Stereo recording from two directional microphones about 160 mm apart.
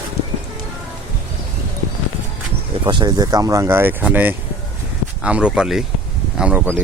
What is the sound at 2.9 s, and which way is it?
Speech, 25° right (ahead or behind).